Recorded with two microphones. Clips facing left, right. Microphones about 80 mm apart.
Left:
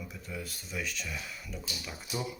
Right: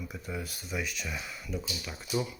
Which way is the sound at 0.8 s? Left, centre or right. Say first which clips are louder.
Even; centre.